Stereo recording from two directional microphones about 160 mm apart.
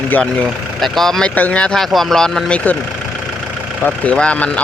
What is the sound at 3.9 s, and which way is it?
Speech, 5° left (ahead or behind).